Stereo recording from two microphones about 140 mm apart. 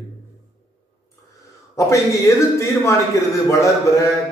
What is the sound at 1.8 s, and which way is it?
A man's voice, 20° left (ahead or behind).